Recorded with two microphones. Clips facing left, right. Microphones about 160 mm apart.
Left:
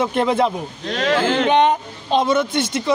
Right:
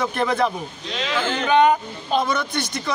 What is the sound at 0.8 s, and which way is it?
Speech, 55° left (ahead or behind).